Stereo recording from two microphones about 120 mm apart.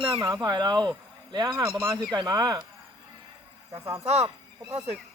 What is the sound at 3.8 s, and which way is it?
Speech, 25° right (ahead or behind).